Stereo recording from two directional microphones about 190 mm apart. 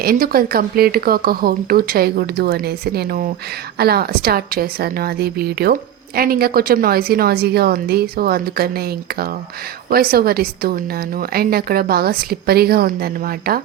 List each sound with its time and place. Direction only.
0.0 s a woman's voice: 50° right (ahead or behind)